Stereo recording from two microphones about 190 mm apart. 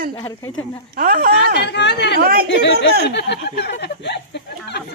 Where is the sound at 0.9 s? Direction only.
50° right (ahead or behind).